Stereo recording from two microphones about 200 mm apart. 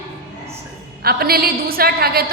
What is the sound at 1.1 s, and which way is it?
A woman's voice, 50° right (ahead or behind).